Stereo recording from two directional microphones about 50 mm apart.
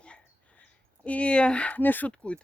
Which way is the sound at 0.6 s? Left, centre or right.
Left.